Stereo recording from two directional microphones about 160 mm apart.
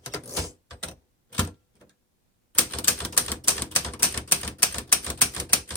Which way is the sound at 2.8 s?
10° left (ahead or behind).